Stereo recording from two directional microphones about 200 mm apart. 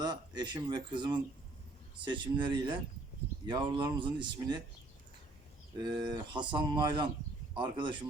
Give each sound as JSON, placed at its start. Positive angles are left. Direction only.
{"t": 0.0, "sound": "speech", "side_deg": -20}
{"t": 5.7, "sound": "speech", "side_deg": -25}